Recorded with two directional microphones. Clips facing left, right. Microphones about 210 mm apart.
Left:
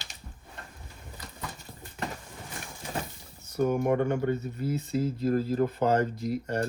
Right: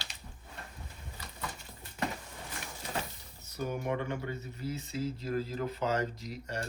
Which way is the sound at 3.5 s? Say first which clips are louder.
Left 9 dB; 50° left (ahead or behind).